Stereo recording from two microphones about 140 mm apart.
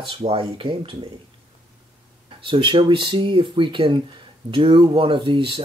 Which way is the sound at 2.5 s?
35° right (ahead or behind).